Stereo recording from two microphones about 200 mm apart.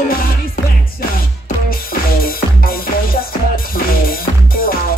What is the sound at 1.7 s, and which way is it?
Music, 45° left (ahead or behind).